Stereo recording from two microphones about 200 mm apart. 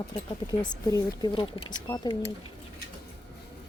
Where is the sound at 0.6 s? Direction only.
20° left (ahead or behind).